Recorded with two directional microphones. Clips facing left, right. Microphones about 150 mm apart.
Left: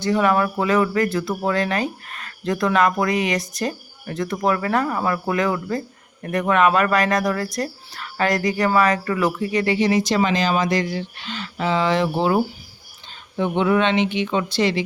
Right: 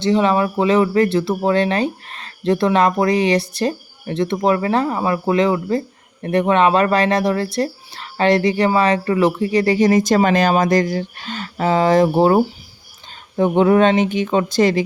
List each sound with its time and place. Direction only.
0.0 s speech: 20° right (ahead or behind); by 14.8 s 45° right (ahead or behind)